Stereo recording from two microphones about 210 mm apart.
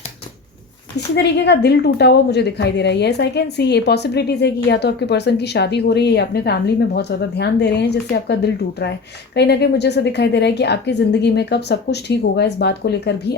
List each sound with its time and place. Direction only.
0.9 s a woman's voice: 55° left (ahead or behind)